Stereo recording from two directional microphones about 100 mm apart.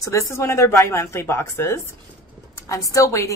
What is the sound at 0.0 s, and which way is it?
A woman's voice, 30° left (ahead or behind).